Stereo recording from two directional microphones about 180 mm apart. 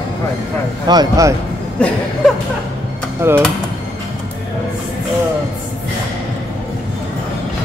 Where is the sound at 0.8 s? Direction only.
20° right (ahead or behind).